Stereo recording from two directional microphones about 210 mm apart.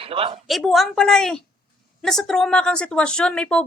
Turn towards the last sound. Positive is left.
turn(degrees=5)  # may be behind; listen again after turning